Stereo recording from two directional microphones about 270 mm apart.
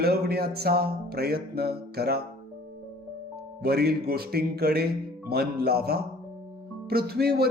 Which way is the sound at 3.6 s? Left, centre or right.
Right.